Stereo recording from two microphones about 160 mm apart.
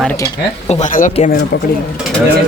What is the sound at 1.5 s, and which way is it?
Speech, 90° left.